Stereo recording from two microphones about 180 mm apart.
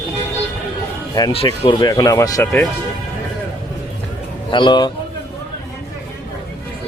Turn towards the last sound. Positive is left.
turn(degrees=25)  # may be behind; listen again after turning